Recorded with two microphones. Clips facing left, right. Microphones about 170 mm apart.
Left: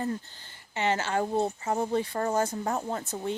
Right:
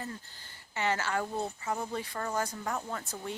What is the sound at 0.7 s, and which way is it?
Speech, 20° left (ahead or behind).